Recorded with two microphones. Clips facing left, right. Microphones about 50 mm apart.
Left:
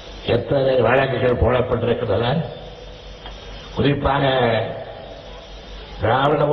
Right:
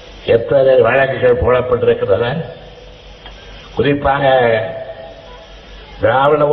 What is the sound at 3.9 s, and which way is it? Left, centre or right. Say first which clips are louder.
Speech: right 5 dB; centre.